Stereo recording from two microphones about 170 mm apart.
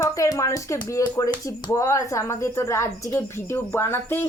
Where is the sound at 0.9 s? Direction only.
20° left (ahead or behind).